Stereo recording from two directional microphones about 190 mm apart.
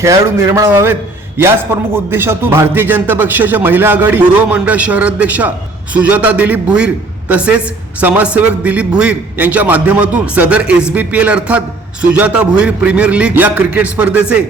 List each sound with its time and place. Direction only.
0.0 s a man's voice: 15° right (ahead or behind)